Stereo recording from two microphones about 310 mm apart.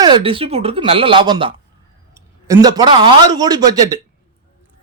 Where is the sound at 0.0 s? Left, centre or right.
Centre.